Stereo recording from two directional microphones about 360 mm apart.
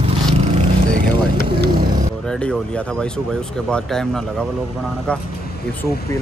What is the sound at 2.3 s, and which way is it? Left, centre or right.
Speech, centre.